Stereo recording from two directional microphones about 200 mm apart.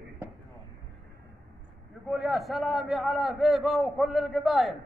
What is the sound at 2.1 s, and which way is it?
A man's voice, centre (ahead or behind).